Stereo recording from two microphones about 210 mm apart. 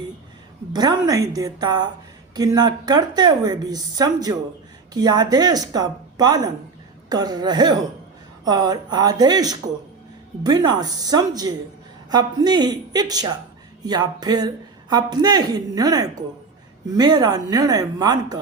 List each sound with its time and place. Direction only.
0.7 s a woman's voice: 20° right (ahead or behind)